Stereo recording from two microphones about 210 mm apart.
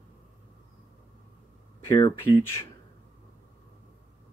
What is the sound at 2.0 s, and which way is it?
Speech, 10° left (ahead or behind).